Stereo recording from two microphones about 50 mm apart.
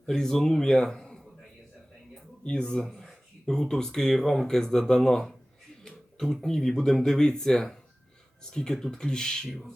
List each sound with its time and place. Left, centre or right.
0.0 s speech: centre
2.4 s speech: centre
2.8 s speech: centre